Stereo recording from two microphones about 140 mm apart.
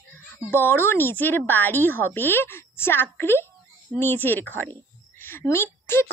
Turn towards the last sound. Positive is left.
turn(degrees=15)  # may be behind; listen again after turning